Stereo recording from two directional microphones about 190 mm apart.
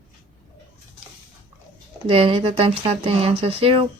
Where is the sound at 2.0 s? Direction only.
30° right (ahead or behind).